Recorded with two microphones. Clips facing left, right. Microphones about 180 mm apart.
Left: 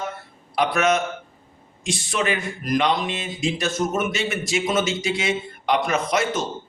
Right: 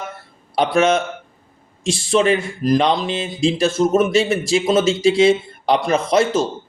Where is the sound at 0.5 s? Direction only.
30° right (ahead or behind).